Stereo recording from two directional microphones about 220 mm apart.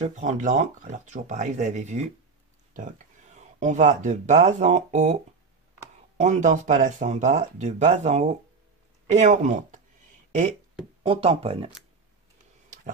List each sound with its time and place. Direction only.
0.0 s speech: 35° right (ahead or behind)
3.3 s speech: 35° right (ahead or behind)
11.1 s speech: 25° right (ahead or behind)